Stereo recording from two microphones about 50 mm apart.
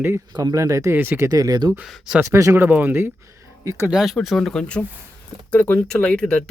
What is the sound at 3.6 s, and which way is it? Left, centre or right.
Speech, right.